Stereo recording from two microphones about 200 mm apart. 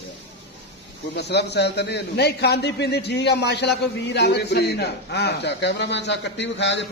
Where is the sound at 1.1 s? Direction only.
55° left (ahead or behind).